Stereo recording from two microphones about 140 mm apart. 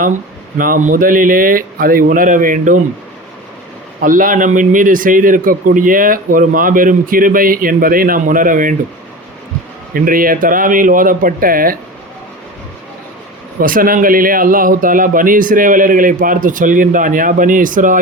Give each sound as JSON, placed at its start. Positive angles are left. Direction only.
{"t": 0.6, "sound": "speech", "side_deg": -75}
{"t": 4.0, "sound": "a man's voice", "side_deg": -75}
{"t": 9.9, "sound": "speech", "side_deg": -85}
{"t": 13.6, "sound": "a man's voice", "side_deg": -85}